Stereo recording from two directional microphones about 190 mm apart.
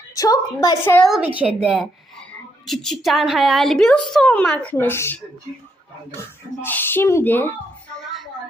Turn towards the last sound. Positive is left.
turn(degrees=10)  # may be behind; listen again after turning